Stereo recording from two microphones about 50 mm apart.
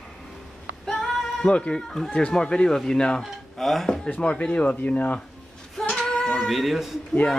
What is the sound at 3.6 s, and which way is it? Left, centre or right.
Speech, centre.